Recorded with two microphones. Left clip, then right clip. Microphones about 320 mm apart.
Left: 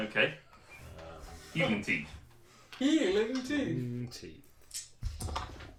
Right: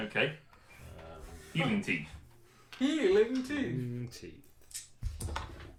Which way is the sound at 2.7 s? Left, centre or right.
Centre.